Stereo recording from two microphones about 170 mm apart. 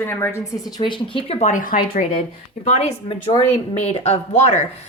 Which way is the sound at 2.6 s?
40° left (ahead or behind).